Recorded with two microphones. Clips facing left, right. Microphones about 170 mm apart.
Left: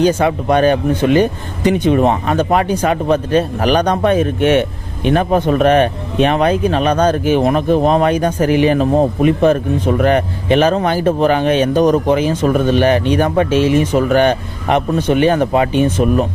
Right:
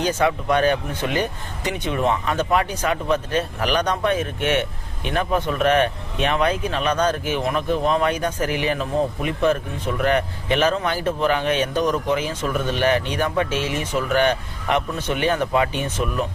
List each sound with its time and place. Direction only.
0.0 s speech: 35° left (ahead or behind)
7.4 s speech: 45° left (ahead or behind)
9.4 s speech: 50° left (ahead or behind)
12.5 s speech: 50° left (ahead or behind)
12.8 s speech: 35° left (ahead or behind)